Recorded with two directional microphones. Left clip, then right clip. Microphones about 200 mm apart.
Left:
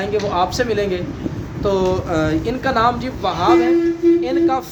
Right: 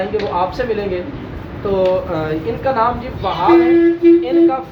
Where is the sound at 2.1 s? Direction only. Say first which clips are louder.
Left 1 dB; 50° left (ahead or behind).